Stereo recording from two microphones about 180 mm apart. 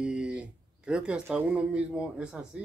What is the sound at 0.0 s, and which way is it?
Speech, 5° right (ahead or behind).